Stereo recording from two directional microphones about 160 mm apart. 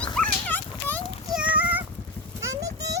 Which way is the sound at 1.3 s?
10° right (ahead or behind).